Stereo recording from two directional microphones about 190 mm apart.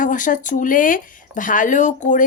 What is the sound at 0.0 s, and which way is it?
Speech, 45° left (ahead or behind).